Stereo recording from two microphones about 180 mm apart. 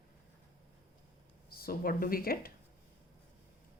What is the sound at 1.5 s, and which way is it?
Speech, 55° left (ahead or behind).